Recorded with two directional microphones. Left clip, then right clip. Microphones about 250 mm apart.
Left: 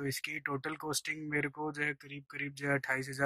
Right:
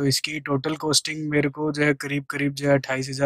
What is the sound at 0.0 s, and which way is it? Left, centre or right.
Speech, centre.